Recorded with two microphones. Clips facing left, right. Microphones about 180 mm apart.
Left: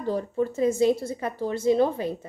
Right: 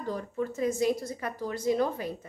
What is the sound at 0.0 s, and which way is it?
A woman's voice, 30° left (ahead or behind).